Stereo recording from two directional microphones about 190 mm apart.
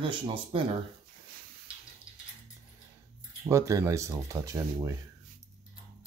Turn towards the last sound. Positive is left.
turn(degrees=-15)  # may be behind; listen again after turning